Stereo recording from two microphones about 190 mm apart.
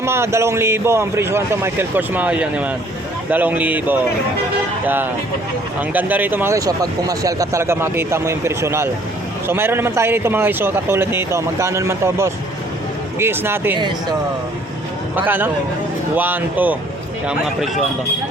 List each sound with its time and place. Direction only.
0.0 s speech: 15° right (ahead or behind)
5.9 s speech: 10° right (ahead or behind)
15.1 s speech: 10° right (ahead or behind)